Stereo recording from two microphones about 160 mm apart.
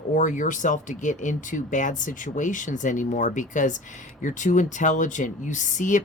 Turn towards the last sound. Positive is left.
turn(degrees=50)  # may be behind; listen again after turning